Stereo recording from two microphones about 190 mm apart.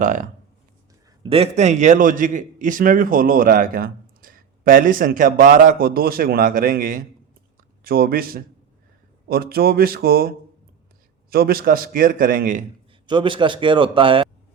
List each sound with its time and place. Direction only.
0.0 s a man's voice: 40° right (ahead or behind)
1.2 s a man's voice: 30° right (ahead or behind)
13.1 s a man's voice: 25° right (ahead or behind)